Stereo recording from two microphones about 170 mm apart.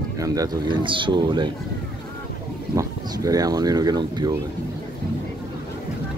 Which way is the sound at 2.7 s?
20° right (ahead or behind).